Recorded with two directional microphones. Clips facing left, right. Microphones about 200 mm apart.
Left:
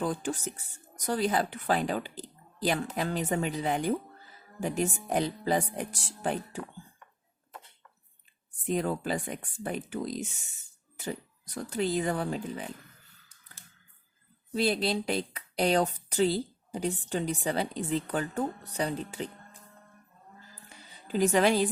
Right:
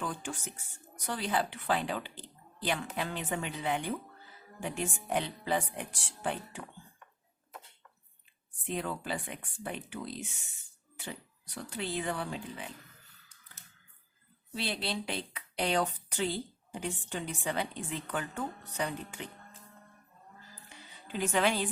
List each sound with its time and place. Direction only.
0.0 s a woman's voice: 40° left (ahead or behind)
8.6 s a woman's voice: 40° left (ahead or behind)
10.9 s music: 40° left (ahead or behind)
11.7 s a woman's voice: 40° left (ahead or behind)
14.5 s a woman's voice: 40° left (ahead or behind)
20.7 s a sound: 40° left (ahead or behind)